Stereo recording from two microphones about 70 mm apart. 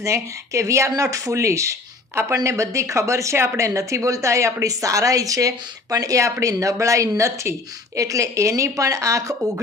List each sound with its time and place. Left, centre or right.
0.0 s a woman's voice: right